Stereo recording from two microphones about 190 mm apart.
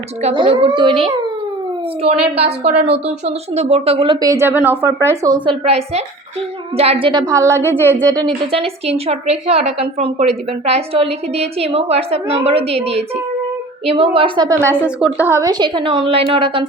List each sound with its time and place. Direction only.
0.2 s a woman's voice: 30° right (ahead or behind); by 7.8 s 15° right (ahead or behind)
8.1 s a woman's voice: 25° right (ahead or behind)